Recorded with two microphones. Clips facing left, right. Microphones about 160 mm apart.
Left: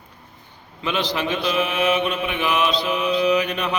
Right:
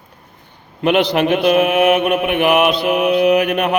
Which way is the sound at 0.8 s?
60° right (ahead or behind).